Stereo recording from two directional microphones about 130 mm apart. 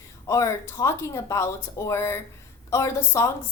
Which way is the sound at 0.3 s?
25° left (ahead or behind).